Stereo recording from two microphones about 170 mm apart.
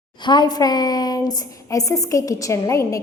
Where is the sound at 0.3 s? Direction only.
25° left (ahead or behind).